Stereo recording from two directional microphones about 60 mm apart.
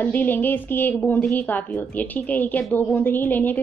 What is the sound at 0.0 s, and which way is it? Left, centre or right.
Speech, left.